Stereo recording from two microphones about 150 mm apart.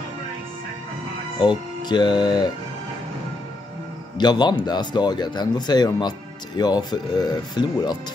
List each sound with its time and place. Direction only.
1.4 s speech: 30° left (ahead or behind)
4.2 s speech: 30° left (ahead or behind)